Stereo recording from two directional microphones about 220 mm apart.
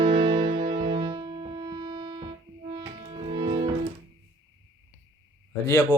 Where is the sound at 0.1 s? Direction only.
25° right (ahead or behind).